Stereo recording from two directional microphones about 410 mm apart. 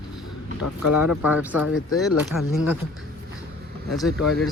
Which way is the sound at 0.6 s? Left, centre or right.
Left.